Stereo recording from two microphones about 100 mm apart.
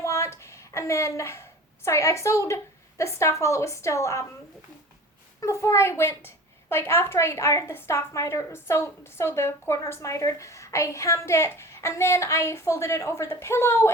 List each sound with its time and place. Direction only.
0.0 s a sound: 30° left (ahead or behind)
3.0 s a woman's voice: 30° left (ahead or behind)
5.4 s a woman's voice: 30° left (ahead or behind)